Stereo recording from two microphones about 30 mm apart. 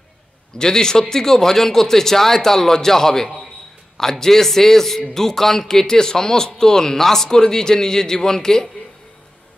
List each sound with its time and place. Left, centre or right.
0.6 s a man's voice: left